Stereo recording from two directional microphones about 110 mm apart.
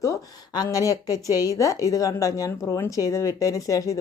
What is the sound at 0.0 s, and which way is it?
A woman's voice, 35° left (ahead or behind).